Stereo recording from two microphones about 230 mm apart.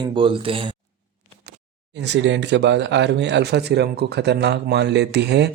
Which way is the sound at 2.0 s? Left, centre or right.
Right.